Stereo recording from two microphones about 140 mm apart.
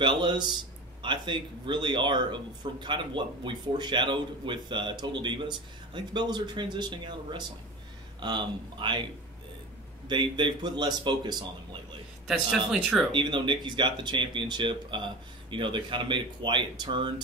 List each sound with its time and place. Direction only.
0.0 s speech: 35° right (ahead or behind)
10.0 s speech: 35° right (ahead or behind)
12.3 s speech: centre (ahead or behind)
13.1 s speech: 35° right (ahead or behind)